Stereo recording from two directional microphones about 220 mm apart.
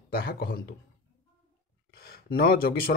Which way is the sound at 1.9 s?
45° left (ahead or behind).